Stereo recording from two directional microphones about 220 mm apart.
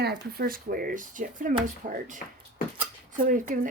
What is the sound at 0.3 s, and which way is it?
Speech, 40° right (ahead or behind).